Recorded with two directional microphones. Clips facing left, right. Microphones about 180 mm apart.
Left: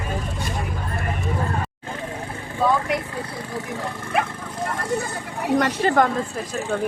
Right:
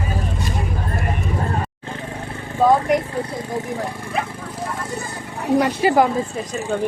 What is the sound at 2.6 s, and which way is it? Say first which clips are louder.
Vehicle: right 6 dB; 40° right (ahead or behind).